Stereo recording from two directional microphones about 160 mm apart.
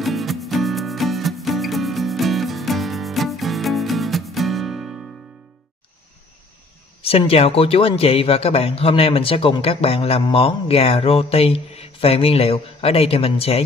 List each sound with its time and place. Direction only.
0.0 s music: centre (ahead or behind)
7.0 s speech: 35° left (ahead or behind)